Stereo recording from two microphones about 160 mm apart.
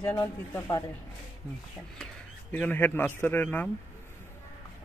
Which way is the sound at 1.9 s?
5° left (ahead or behind).